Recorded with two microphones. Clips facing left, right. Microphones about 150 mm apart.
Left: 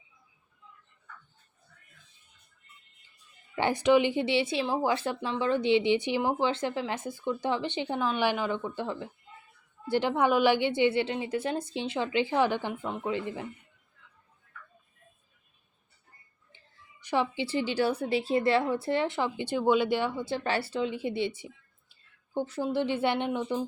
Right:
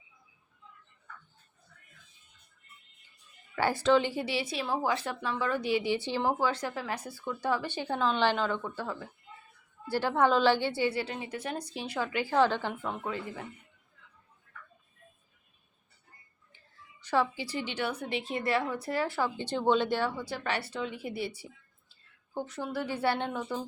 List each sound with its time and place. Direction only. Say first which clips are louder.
3.5 s a woman's voice: left 2 dB; 20° left (ahead or behind)
17.0 s music: even; 15° left (ahead or behind)
17.3 s a woman's voice: left 7 dB; 25° left (ahead or behind)